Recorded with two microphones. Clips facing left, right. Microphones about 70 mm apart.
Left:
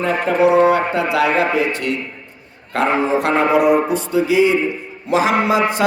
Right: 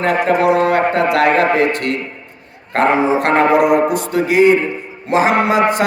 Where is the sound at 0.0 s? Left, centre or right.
Right.